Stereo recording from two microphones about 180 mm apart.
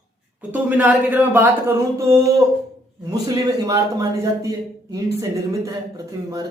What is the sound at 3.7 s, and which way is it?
A woman's voice, 20° right (ahead or behind).